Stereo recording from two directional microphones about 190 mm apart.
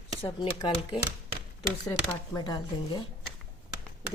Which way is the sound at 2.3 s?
20° left (ahead or behind).